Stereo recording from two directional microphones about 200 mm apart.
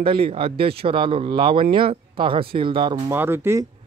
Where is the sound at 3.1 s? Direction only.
10° right (ahead or behind).